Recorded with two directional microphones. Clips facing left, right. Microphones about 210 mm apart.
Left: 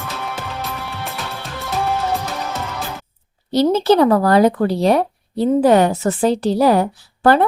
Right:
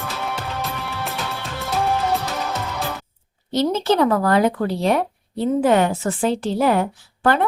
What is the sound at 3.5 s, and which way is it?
Speech, 35° left (ahead or behind).